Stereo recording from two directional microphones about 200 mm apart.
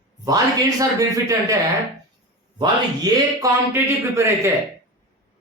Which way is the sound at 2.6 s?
20° right (ahead or behind).